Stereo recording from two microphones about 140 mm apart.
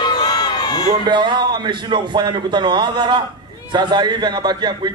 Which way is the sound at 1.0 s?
35° right (ahead or behind).